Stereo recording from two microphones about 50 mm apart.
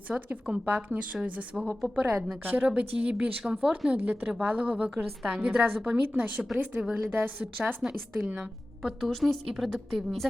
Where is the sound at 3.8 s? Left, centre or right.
Right.